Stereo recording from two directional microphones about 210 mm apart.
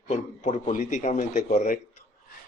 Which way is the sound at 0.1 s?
35° left (ahead or behind).